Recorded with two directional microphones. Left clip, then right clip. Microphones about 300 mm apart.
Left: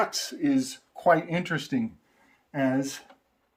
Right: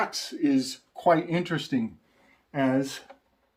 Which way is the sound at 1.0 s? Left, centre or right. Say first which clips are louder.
Even; centre.